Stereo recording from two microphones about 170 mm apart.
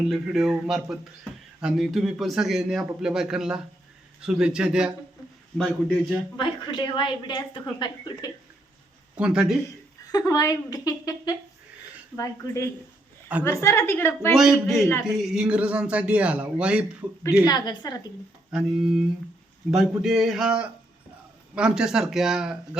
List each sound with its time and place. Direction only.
0.1 s speech: 5° right (ahead or behind)
6.3 s a woman's voice: 30° left (ahead or behind)
9.1 s speech: 5° right (ahead or behind)
10.1 s a woman's voice: 20° left (ahead or behind)
14.3 s speech: centre (ahead or behind)
17.4 s a woman's voice: 25° left (ahead or behind)
18.5 s speech: 5° right (ahead or behind)
20.0 s speech: centre (ahead or behind)